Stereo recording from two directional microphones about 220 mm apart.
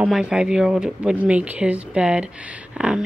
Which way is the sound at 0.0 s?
5° right (ahead or behind).